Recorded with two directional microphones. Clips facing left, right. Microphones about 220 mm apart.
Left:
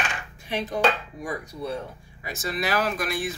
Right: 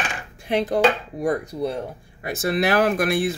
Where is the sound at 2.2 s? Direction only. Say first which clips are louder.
Right 8 dB; 60° right (ahead or behind).